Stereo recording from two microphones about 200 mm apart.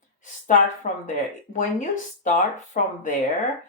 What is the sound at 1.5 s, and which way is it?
A woman's voice, 40° left (ahead or behind).